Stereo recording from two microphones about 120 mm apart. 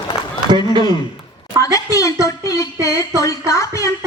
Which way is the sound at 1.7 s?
30° left (ahead or behind).